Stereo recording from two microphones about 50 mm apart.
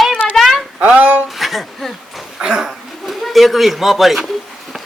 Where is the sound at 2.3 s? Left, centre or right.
Centre.